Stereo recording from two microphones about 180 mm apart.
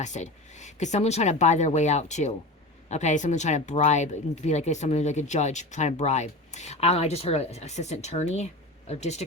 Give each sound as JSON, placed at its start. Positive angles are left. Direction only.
{"t": 0.0, "sound": "speech", "side_deg": 40}